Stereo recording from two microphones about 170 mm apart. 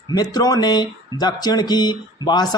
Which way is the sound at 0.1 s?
20° left (ahead or behind).